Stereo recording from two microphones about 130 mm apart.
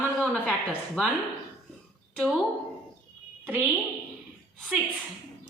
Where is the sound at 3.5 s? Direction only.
10° right (ahead or behind).